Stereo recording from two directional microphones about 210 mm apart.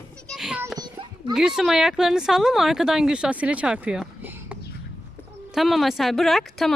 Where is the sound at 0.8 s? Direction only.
20° right (ahead or behind).